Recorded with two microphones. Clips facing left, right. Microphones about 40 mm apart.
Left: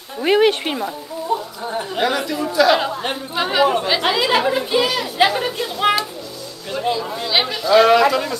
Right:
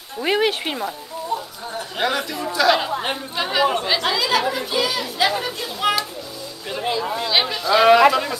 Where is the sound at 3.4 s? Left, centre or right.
Centre.